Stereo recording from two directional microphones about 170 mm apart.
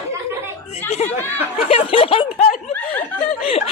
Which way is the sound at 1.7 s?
35° left (ahead or behind).